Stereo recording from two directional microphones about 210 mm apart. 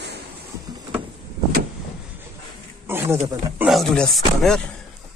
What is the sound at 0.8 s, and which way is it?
Vehicle, 20° right (ahead or behind).